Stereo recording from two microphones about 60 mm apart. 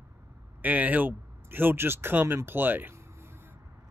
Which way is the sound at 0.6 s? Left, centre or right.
Right.